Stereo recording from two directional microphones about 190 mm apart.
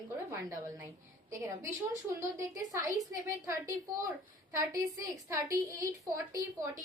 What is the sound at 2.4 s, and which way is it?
A woman's voice, 15° right (ahead or behind).